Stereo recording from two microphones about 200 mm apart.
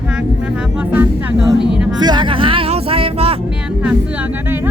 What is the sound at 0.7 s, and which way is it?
Music, 10° right (ahead or behind).